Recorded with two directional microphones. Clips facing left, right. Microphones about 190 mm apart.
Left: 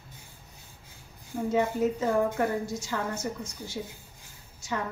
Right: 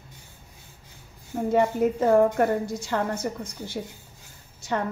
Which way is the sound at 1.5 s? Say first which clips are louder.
Right 4 dB; 55° right (ahead or behind).